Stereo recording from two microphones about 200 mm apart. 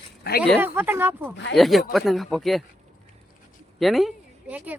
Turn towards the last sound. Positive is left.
turn(degrees=-5)  # may be behind; listen again after turning